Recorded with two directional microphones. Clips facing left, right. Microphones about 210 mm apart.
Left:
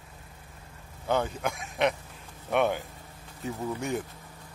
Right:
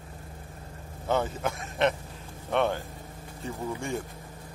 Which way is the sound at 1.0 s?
Centre (ahead or behind).